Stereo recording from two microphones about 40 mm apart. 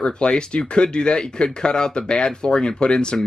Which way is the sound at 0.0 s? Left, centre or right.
Left.